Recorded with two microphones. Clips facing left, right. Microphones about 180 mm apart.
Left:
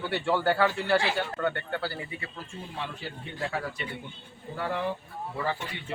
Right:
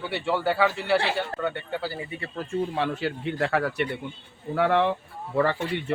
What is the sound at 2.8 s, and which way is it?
Speech, 80° right.